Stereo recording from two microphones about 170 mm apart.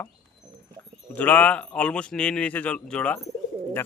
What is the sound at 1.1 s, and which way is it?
Speech, 10° left (ahead or behind).